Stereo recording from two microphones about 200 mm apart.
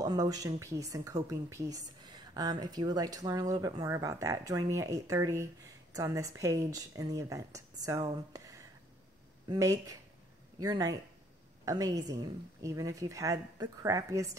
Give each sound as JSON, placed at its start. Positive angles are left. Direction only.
{"t": 0.0, "sound": "a woman's voice", "side_deg": -20}